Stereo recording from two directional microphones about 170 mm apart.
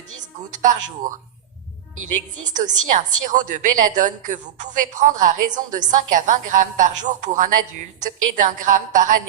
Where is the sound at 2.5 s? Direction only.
45° right (ahead or behind).